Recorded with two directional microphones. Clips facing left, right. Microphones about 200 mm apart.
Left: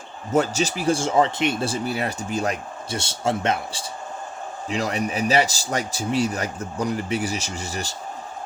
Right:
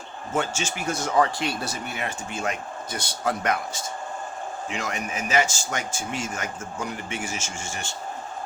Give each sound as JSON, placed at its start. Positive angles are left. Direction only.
{"t": 0.3, "sound": "speech", "side_deg": 40}